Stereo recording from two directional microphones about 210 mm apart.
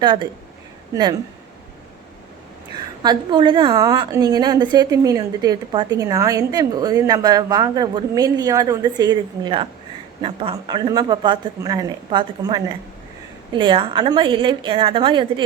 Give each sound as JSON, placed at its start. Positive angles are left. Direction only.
{"t": 0.0, "sound": "speech", "side_deg": -20}
{"t": 3.0, "sound": "a woman's voice", "side_deg": -20}